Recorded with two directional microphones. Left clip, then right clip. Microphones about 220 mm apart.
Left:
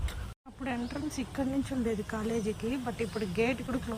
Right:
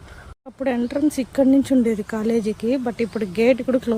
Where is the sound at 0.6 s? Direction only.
30° right (ahead or behind).